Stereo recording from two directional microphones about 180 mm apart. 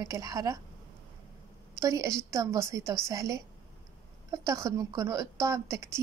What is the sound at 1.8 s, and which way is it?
A woman's voice, 20° right (ahead or behind).